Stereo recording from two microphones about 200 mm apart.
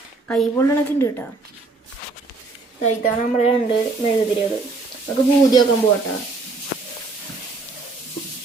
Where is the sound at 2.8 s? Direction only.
35° left (ahead or behind).